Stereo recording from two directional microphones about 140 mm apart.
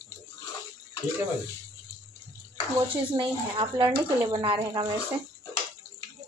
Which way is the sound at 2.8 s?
35° right (ahead or behind).